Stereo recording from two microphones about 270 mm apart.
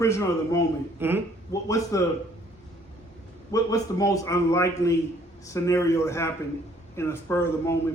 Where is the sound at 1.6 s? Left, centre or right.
Centre.